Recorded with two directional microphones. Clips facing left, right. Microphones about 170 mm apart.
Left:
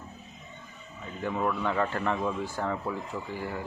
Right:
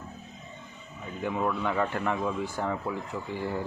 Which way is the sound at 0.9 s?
10° right (ahead or behind).